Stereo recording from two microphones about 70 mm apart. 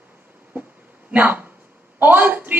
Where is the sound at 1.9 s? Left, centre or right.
Right.